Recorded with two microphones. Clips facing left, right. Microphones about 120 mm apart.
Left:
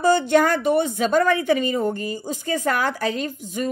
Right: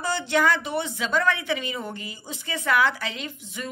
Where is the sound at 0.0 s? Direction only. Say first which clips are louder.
Left 7 dB; 50° left (ahead or behind).